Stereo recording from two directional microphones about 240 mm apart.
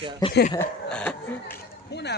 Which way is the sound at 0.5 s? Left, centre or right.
Centre.